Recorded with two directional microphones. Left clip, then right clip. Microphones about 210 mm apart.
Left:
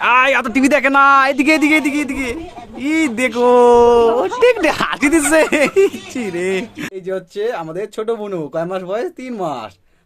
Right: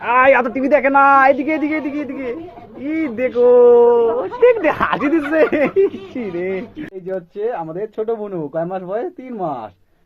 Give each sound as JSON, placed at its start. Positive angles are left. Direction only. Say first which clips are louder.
{"t": 0.0, "sound": "speech", "louder": "even", "side_deg": 35}